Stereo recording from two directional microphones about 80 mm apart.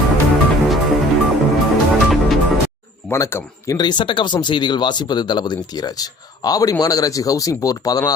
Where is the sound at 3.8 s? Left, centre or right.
Left.